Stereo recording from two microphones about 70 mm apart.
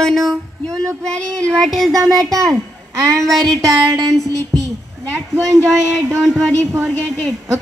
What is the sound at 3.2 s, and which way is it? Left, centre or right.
Speech, centre.